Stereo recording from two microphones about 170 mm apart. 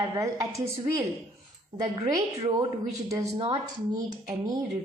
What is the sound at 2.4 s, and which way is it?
A woman's voice, 30° right (ahead or behind).